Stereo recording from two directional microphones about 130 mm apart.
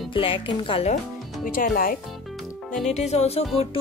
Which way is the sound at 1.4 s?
90° left.